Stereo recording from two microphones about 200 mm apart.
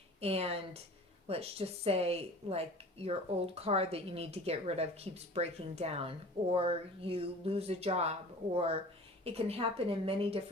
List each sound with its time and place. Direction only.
0.2 s a woman's voice: 30° right (ahead or behind)